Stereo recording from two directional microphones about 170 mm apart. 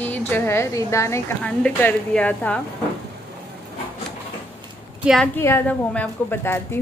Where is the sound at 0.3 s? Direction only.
15° left (ahead or behind).